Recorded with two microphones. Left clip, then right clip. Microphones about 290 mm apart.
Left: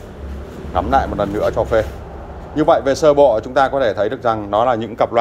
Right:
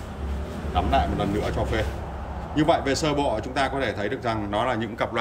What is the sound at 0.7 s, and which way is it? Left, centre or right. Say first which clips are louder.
Speech: left 7 dB; centre.